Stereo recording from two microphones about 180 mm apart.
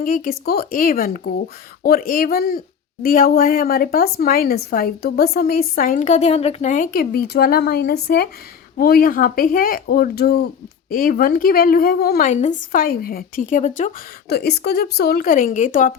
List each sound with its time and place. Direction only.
0.0 s a woman's voice: 50° left (ahead or behind)
12.2 s a woman's voice: 40° left (ahead or behind)
14.3 s speech: 65° left (ahead or behind); by 15.9 s 45° left (ahead or behind)